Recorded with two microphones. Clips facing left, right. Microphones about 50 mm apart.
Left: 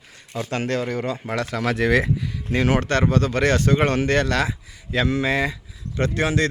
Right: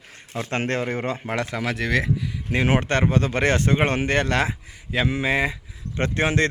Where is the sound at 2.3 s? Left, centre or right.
Right.